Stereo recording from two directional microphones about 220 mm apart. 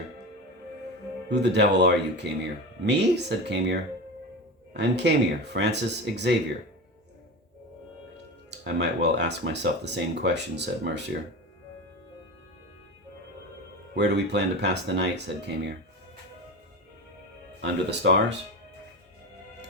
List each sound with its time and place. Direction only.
1.3 s speech: 50° right (ahead or behind)
8.6 s speech: 50° right (ahead or behind)
13.9 s speech: 50° right (ahead or behind)
17.6 s speech: 50° right (ahead or behind)